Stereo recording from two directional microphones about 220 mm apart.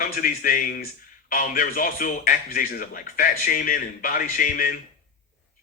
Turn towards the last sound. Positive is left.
turn(degrees=40)  # may be behind; listen again after turning